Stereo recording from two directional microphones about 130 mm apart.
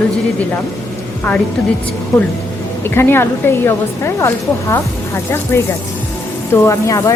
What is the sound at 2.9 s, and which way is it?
A woman's voice, 20° left (ahead or behind).